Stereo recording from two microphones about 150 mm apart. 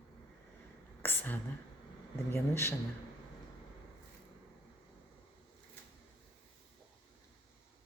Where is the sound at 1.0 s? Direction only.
10° left (ahead or behind).